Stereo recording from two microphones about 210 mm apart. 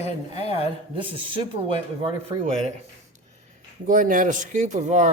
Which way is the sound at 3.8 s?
40° right (ahead or behind).